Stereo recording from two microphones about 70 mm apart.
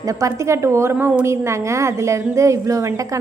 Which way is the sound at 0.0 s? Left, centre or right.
Right.